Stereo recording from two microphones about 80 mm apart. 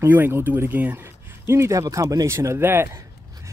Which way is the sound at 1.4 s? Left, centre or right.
Right.